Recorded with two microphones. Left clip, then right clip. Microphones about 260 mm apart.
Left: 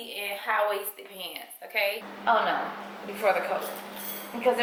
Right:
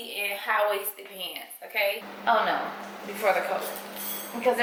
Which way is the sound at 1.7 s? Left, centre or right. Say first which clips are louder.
Right 1 dB; centre.